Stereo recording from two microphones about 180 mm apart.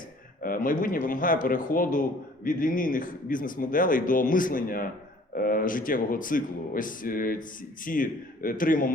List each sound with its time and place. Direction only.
0.4 s speech: 50° left (ahead or behind)